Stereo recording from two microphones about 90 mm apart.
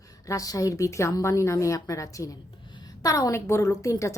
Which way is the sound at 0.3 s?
40° left (ahead or behind).